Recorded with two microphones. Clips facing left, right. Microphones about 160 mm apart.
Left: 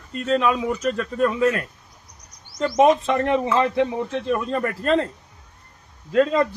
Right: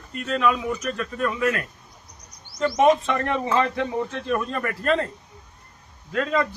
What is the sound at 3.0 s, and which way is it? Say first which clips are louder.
Speech: left 4 dB; 30° left (ahead or behind).